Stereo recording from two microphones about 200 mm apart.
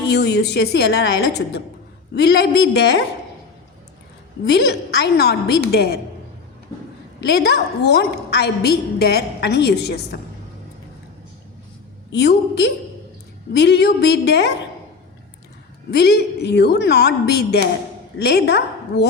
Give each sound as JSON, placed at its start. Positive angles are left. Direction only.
{"t": 0.1, "sound": "a woman's voice", "side_deg": 55}
{"t": 4.4, "sound": "a woman's voice", "side_deg": 55}
{"t": 7.2, "sound": "a woman's voice", "side_deg": 55}
{"t": 12.1, "sound": "a woman's voice", "side_deg": 60}
{"t": 15.9, "sound": "a woman's voice", "side_deg": 55}